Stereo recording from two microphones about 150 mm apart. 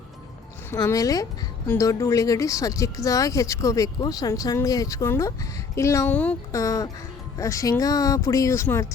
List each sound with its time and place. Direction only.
0.7 s speech: 20° left (ahead or behind)
6.5 s speech: 20° left (ahead or behind)